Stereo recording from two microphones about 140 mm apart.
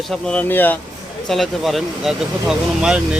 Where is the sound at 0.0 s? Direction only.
5° left (ahead or behind).